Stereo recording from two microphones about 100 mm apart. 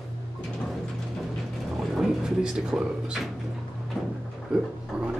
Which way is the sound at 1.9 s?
5° right (ahead or behind).